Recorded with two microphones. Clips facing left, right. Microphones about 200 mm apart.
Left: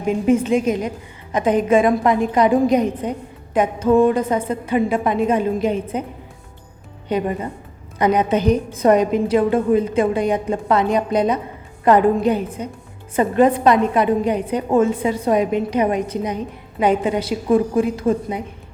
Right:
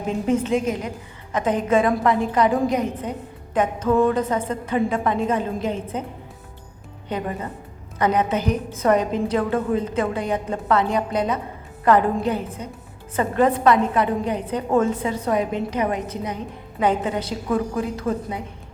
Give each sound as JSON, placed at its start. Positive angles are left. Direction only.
{"t": 0.0, "sound": "a woman's voice", "side_deg": 10}
{"t": 7.1, "sound": "a woman's voice", "side_deg": 20}